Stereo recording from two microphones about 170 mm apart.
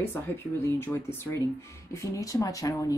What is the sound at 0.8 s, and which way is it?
Speech, 15° left (ahead or behind).